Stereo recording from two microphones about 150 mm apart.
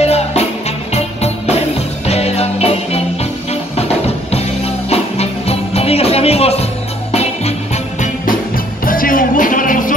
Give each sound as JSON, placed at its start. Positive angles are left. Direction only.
{"t": 0.0, "sound": "music", "side_deg": 45}
{"t": 4.3, "sound": "music", "side_deg": 45}
{"t": 8.8, "sound": "music", "side_deg": 70}